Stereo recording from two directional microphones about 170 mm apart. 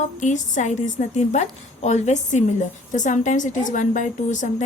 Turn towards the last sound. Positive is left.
turn(degrees=45)  # may be behind; listen again after turning